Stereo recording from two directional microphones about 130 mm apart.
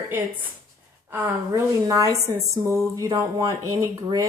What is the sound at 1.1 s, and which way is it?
A woman's voice, 20° right (ahead or behind).